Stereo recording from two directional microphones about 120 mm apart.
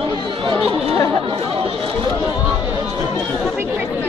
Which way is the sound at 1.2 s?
45° right (ahead or behind).